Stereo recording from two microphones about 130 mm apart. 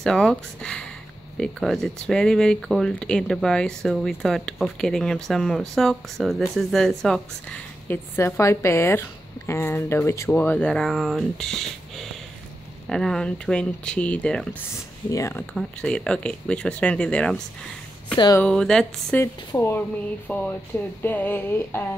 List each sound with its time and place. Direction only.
0.0 s speech: 5° left (ahead or behind)
8.2 s a woman's voice: 20° left (ahead or behind)
15.0 s a woman's voice: 25° left (ahead or behind)
15.5 s speech: 5° left (ahead or behind)
18.4 s speech: 5° left (ahead or behind)
19.5 s a woman's voice: 20° left (ahead or behind)